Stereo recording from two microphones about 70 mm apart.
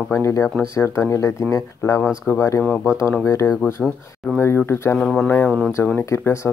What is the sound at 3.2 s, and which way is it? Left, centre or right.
Speech, left.